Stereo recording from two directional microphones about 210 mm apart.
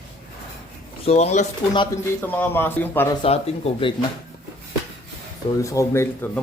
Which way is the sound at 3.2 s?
30° left (ahead or behind).